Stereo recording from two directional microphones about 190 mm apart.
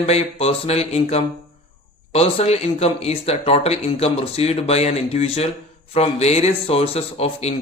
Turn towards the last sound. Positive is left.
turn(degrees=35)  # may be behind; listen again after turning